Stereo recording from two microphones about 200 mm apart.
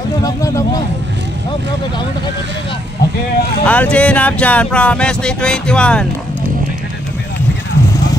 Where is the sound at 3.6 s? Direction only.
5° left (ahead or behind).